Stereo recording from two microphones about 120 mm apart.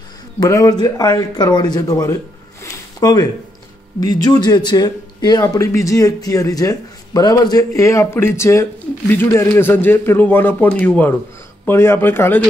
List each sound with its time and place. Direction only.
0.4 s speech: 30° left (ahead or behind)
2.6 s a sound: 30° left (ahead or behind)
4.0 s a man's voice: 35° left (ahead or behind)